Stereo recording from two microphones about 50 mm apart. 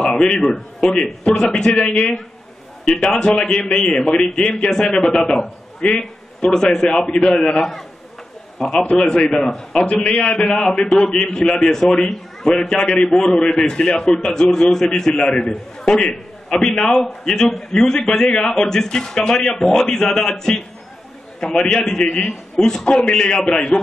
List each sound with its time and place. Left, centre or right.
0.0 s a man's voice: centre
1.9 s a man's voice: left
7.5 s a man's voice: centre
12.8 s a man's voice: left
16.8 s a man's voice: centre